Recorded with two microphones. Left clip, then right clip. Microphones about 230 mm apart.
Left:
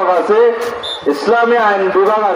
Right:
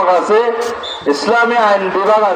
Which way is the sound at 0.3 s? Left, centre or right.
Right.